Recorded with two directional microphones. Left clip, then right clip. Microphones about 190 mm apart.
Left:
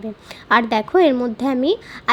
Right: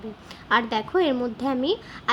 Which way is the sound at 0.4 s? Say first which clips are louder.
Left 6 dB; 30° left (ahead or behind).